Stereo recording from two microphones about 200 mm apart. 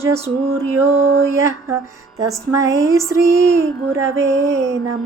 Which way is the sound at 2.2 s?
15° right (ahead or behind).